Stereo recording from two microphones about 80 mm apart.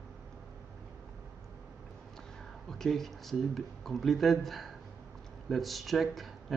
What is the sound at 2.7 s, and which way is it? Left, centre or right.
Speech, centre.